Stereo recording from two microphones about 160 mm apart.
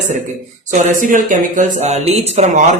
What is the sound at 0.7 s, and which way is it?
Speech, 55° right (ahead or behind).